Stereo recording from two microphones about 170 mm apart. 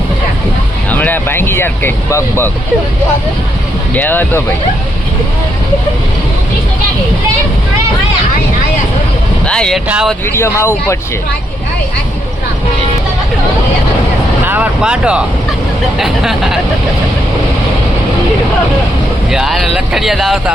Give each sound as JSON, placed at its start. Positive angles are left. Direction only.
{"t": 0.9, "sound": "speech", "side_deg": 10}
{"t": 3.9, "sound": "speech", "side_deg": 10}
{"t": 9.5, "sound": "speech", "side_deg": 5}
{"t": 10.2, "sound": "speech", "side_deg": 15}
{"t": 14.4, "sound": "speech", "side_deg": -10}
{"t": 19.3, "sound": "speech", "side_deg": 0}